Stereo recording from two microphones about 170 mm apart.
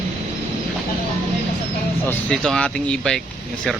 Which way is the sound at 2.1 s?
5° left (ahead or behind).